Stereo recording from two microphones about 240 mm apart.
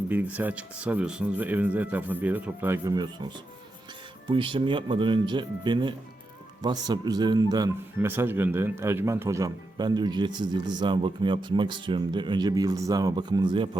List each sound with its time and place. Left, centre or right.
0.1 s speech: centre